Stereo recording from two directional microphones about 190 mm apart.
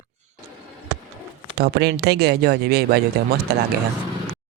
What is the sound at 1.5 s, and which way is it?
Speech, 60° right (ahead or behind).